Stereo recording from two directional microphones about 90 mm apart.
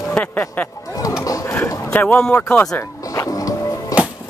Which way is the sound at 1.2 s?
40° left (ahead or behind).